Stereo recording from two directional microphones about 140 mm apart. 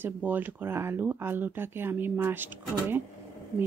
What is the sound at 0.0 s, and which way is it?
Speech, 10° right (ahead or behind).